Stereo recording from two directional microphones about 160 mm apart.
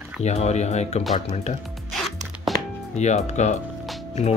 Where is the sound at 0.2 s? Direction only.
45° left (ahead or behind).